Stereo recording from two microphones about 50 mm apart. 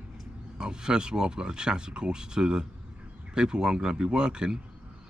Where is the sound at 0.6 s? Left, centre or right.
Centre.